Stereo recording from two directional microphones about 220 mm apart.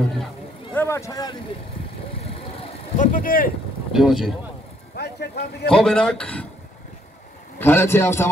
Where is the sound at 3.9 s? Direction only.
Centre (ahead or behind).